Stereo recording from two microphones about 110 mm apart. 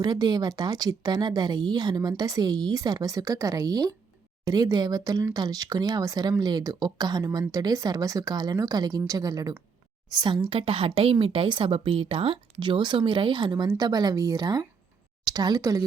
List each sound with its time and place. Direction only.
0.0 s a woman's voice: 40° right (ahead or behind)